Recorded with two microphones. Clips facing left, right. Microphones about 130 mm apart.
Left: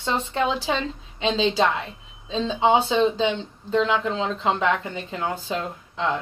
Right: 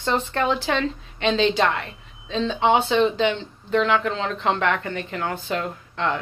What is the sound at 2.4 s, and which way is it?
Speech, 15° left (ahead or behind).